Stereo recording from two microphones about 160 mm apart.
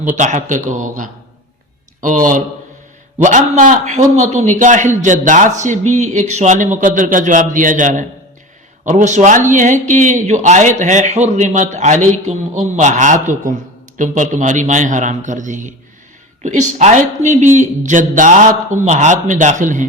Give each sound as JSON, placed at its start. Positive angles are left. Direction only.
{"t": 0.2, "sound": "a man's voice", "side_deg": -50}